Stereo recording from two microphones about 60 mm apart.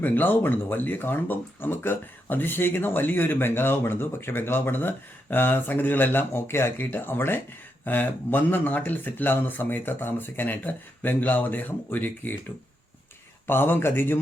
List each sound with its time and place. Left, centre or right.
0.0 s speech: left
13.5 s speech: left